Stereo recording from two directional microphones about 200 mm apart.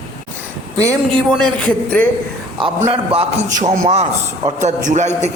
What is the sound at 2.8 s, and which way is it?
A man's voice, 30° right (ahead or behind).